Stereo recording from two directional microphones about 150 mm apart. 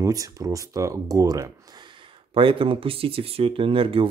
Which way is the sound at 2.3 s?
35° right (ahead or behind).